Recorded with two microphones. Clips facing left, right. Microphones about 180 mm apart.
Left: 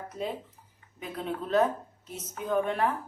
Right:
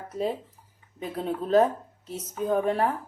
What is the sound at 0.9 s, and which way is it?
Speech, 35° right (ahead or behind).